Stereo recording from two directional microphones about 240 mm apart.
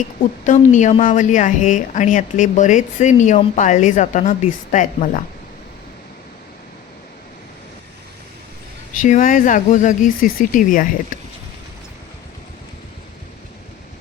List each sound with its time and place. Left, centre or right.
0.4 s a woman's voice: left
9.0 s a woman's voice: left
11.1 s a sound: left